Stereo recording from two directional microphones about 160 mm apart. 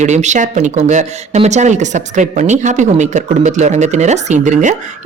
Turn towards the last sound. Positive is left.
turn(degrees=-50)  # may be behind; listen again after turning